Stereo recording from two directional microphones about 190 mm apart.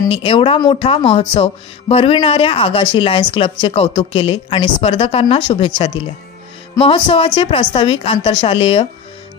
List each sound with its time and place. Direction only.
0.1 s speech: 30° left (ahead or behind)
6.8 s speech: 30° left (ahead or behind)